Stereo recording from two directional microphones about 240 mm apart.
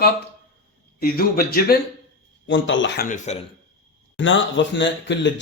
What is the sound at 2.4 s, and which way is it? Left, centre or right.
Speech, left.